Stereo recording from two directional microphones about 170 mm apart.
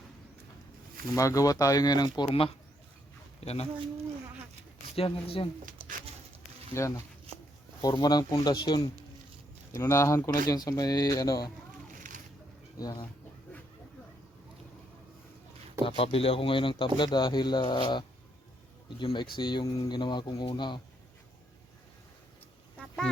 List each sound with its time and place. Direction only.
1.1 s speech: 20° left (ahead or behind); by 3.7 s 40° left (ahead or behind)
4.9 s speech: 35° left (ahead or behind)
6.7 s speech: 15° left (ahead or behind)
12.8 s speech: 20° left (ahead or behind)
15.8 s speech: 35° left (ahead or behind)